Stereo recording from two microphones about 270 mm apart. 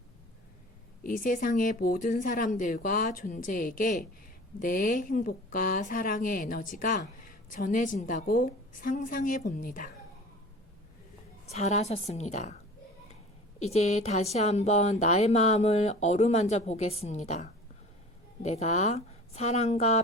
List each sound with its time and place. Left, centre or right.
1.0 s speech: left
11.4 s speech: left
13.6 s speech: left